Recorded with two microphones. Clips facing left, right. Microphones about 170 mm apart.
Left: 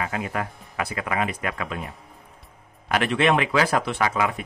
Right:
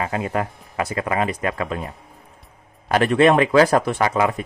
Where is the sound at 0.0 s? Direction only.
30° right (ahead or behind).